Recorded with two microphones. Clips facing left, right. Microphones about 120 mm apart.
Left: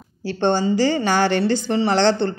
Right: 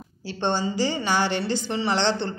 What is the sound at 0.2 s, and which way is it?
A woman's voice, 50° left (ahead or behind).